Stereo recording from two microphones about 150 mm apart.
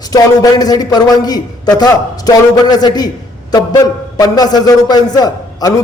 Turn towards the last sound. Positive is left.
turn(degrees=25)  # may be behind; listen again after turning